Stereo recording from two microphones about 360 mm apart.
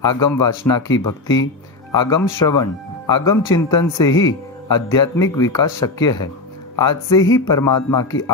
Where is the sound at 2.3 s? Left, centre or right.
Centre.